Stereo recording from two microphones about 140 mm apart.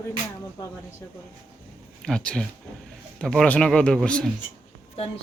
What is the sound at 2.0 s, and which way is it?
Speech, 5° left (ahead or behind).